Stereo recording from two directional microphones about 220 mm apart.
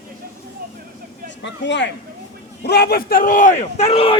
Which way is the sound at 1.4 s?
55° left (ahead or behind).